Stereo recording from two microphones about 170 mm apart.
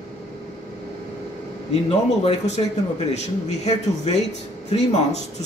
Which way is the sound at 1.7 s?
40° left (ahead or behind).